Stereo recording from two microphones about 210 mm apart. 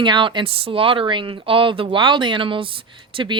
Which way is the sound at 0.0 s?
20° right (ahead or behind).